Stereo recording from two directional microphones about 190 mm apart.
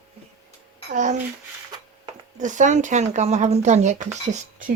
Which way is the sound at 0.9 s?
40° right (ahead or behind).